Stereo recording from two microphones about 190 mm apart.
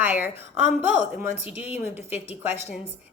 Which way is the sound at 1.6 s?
10° right (ahead or behind).